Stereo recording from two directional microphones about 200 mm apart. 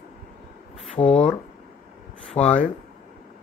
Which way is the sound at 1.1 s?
30° left (ahead or behind).